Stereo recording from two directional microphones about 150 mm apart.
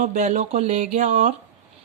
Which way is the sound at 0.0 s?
55° right (ahead or behind).